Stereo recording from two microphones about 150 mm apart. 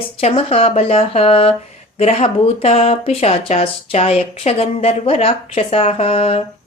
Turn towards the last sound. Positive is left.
turn(degrees=40)  # may be behind; listen again after turning